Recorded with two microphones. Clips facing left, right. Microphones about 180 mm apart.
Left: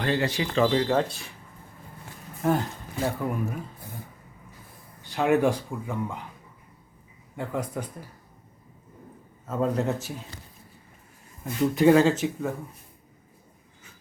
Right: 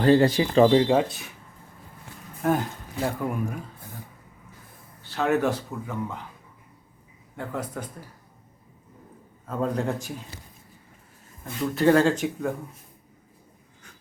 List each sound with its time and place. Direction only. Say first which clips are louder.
0.0 s speech: right 8 dB; 35° right (ahead or behind)
0.8 s speech: right 3 dB; 15° right (ahead or behind)
1.0 s speech: right 2 dB; centre (ahead or behind)
2.4 s speech: right 1 dB; centre (ahead or behind)
5.0 s speech: left 2 dB; 15° left (ahead or behind)
7.3 s speech: left 2 dB; 10° left (ahead or behind)
9.5 s speech: left 1 dB; 5° left (ahead or behind)
11.7 s speech: left 1 dB; 10° left (ahead or behind)